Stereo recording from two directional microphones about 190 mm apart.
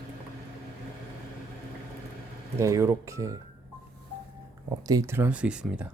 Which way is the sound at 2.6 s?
15° right (ahead or behind).